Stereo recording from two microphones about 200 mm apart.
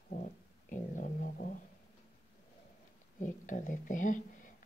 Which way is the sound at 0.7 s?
40° left (ahead or behind).